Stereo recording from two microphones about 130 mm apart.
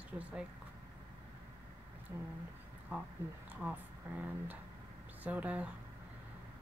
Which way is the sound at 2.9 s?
15° right (ahead or behind).